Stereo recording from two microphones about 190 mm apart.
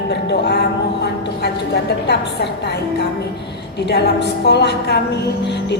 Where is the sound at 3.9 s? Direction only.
60° left (ahead or behind).